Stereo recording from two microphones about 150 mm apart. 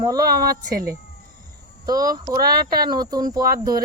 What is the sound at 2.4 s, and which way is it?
Speech, 80° right.